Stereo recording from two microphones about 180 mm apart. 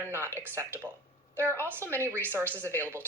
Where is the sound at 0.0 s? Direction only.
15° right (ahead or behind).